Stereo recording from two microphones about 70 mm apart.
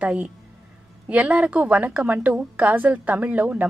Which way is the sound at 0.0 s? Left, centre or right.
Right.